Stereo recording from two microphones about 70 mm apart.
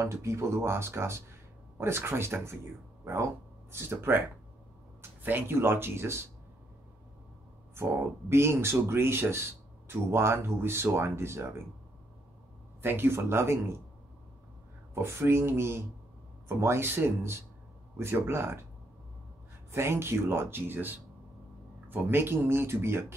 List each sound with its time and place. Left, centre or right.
0.0 s speech: right
3.7 s speech: right
5.2 s speech: right
7.7 s speech: right
12.8 s speech: right
15.0 s speech: right
19.7 s speech: right